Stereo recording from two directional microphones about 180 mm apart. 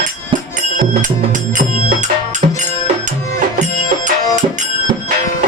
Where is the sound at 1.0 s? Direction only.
45° right (ahead or behind).